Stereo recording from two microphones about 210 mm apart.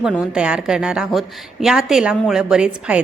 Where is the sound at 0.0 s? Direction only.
5° right (ahead or behind).